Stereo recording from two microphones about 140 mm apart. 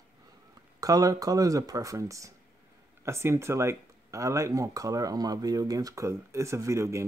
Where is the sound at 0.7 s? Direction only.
25° right (ahead or behind).